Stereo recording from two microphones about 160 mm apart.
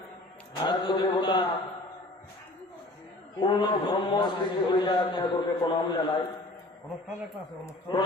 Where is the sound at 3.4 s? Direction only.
30° left (ahead or behind).